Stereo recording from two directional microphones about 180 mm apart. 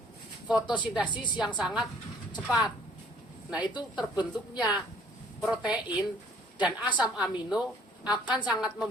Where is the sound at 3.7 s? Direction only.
25° left (ahead or behind).